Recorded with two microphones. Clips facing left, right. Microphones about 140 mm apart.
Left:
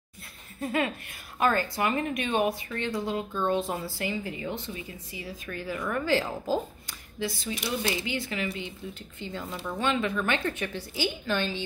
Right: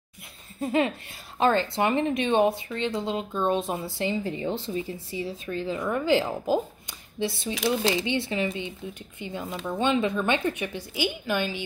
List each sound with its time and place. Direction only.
0.6 s speech: 25° right (ahead or behind)
7.5 s speech: 90° right
8.0 s speech: 25° right (ahead or behind)